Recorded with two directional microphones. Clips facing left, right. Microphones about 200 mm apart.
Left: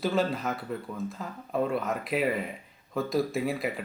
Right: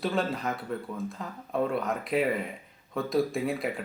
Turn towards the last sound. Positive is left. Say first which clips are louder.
# even
turn(degrees=0)  # may be behind; listen again after turning